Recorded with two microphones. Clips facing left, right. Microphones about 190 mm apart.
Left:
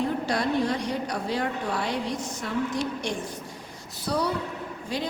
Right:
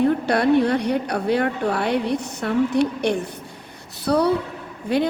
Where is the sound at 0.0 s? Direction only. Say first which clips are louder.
Right 8 dB; 60° right (ahead or behind).